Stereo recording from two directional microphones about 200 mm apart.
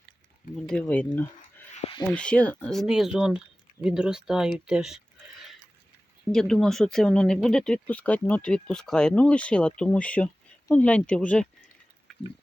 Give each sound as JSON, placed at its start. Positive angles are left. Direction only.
{"t": 0.5, "sound": "speech", "side_deg": 5}
{"t": 1.7, "sound": "a sound", "side_deg": 25}
{"t": 2.0, "sound": "speech", "side_deg": 5}